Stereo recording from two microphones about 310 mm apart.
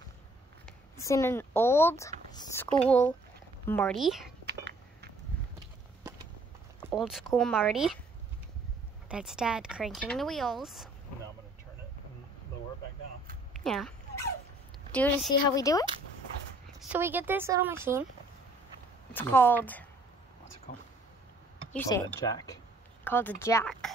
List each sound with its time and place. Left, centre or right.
0.7 s speech: centre
4.5 s a sound: right
6.8 s speech: centre
9.1 s speech: centre
13.5 s a sound: centre
14.9 s a woman's voice: centre
16.9 s speech: centre
19.1 s speech: centre
20.7 s speech: left
21.7 s speech: centre